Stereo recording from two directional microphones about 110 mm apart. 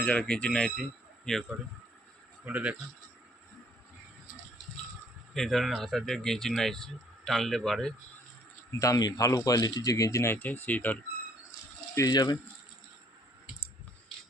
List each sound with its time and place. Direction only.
0.0 s speech: 10° left (ahead or behind)
2.4 s speech: 15° right (ahead or behind)
5.3 s speech: 5° left (ahead or behind)
8.8 s speech: 35° left (ahead or behind); by 10.9 s 15° left (ahead or behind)
11.9 s speech: 35° left (ahead or behind)